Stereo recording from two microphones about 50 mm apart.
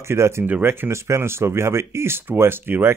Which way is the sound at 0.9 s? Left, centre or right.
Right.